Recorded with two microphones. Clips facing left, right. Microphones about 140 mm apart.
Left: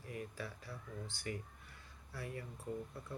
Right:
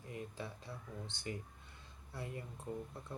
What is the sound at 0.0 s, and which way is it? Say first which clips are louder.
Speech: even; 20° right (ahead or behind).